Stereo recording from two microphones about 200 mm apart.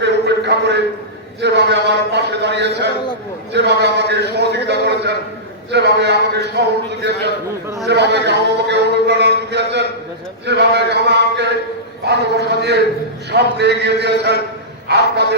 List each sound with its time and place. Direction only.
0.0 s a sound: 60° right (ahead or behind)
1.4 s a man's voice: 60° right (ahead or behind)
7.9 s a man's voice: 60° right (ahead or behind)